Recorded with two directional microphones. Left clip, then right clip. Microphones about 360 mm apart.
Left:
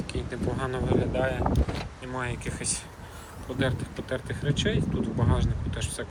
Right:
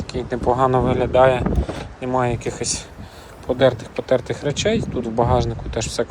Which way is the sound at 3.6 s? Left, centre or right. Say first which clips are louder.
Right 13 dB; centre.